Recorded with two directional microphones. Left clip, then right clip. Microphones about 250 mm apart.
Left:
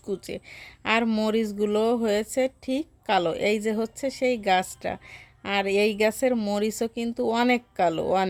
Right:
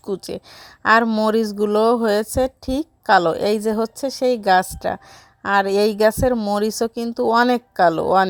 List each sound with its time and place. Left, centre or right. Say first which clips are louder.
0.0 s a woman's voice: right 6 dB; centre